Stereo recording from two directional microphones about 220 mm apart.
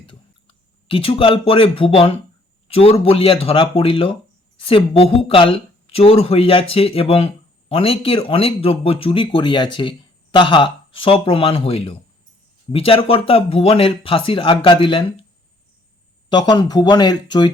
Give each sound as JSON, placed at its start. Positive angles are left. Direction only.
{"t": 0.9, "sound": "speech", "side_deg": 25}
{"t": 16.3, "sound": "speech", "side_deg": 20}